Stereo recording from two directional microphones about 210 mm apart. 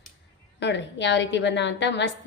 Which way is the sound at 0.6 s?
55° left (ahead or behind).